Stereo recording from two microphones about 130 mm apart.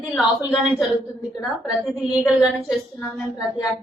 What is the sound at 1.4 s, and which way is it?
A woman's voice, centre (ahead or behind).